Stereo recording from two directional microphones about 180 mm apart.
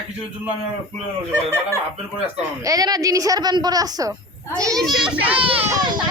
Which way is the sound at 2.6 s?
20° right (ahead or behind).